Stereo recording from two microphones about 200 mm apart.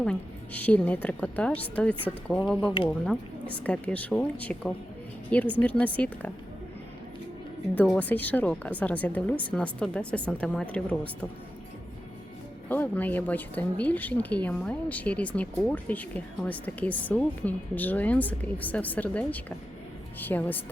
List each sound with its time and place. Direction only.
0.0 s speech: 5° left (ahead or behind)
2.6 s speech: 25° left (ahead or behind)
3.5 s speech: 5° left (ahead or behind)
7.9 s speech: 10° left (ahead or behind)
12.6 s speech: 10° left (ahead or behind)